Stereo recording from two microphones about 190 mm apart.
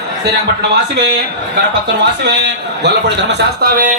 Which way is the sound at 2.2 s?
65° right (ahead or behind).